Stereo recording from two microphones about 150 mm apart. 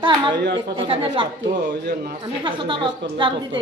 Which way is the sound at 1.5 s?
85° right.